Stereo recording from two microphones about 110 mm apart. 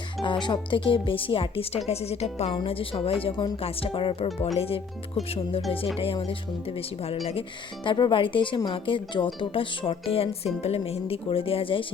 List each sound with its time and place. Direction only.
0.2 s speech: 45° left (ahead or behind); by 2.6 s 70° left (ahead or behind)
2.9 s a woman's voice: 55° left (ahead or behind)
7.9 s speech: 45° left (ahead or behind)